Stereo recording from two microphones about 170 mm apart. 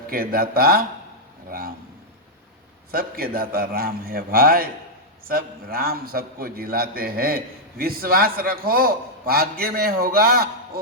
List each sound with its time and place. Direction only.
0.1 s a man's voice: 60° right (ahead or behind)
1.5 s a sound: 55° right (ahead or behind)
2.9 s a man's voice: 60° right (ahead or behind)